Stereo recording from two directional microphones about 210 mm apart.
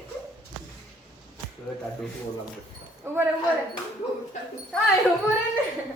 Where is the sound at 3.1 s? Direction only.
10° right (ahead or behind).